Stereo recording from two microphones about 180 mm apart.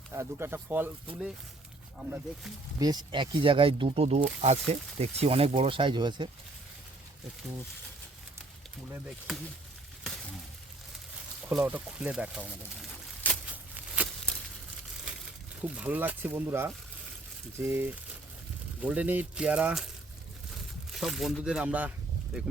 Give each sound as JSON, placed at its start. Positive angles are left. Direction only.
{"t": 0.1, "sound": "speech", "side_deg": -15}
{"t": 2.0, "sound": "speech", "side_deg": -5}
{"t": 2.8, "sound": "speech", "side_deg": -20}
{"t": 9.0, "sound": "speech", "side_deg": 0}
{"t": 11.4, "sound": "speech", "side_deg": -5}
{"t": 13.2, "sound": "a sound", "side_deg": 10}
{"t": 13.7, "sound": "a sound", "side_deg": -5}
{"t": 15.6, "sound": "speech", "side_deg": -5}
{"t": 20.9, "sound": "speech", "side_deg": 0}